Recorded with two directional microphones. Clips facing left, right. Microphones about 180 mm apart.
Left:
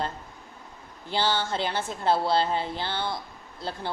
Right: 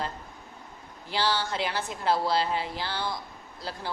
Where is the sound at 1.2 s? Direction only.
25° left (ahead or behind).